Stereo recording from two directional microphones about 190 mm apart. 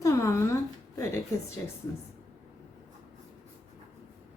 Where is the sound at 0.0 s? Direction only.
15° left (ahead or behind).